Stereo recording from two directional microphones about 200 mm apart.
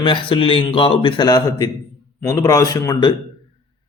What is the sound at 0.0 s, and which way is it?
A man's voice, 25° left (ahead or behind).